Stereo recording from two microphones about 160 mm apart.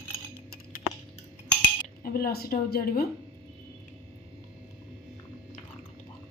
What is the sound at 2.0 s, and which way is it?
Speech, 70° left (ahead or behind).